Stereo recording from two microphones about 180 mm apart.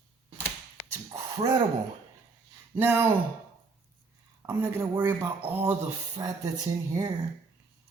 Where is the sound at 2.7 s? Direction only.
10° right (ahead or behind).